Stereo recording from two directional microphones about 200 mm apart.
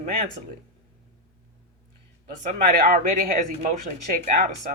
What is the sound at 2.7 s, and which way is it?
Speech, 45° right (ahead or behind).